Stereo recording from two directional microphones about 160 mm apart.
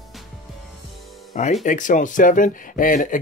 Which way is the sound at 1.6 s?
55° left (ahead or behind).